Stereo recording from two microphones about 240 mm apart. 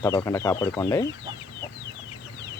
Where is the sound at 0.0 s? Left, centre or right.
Centre.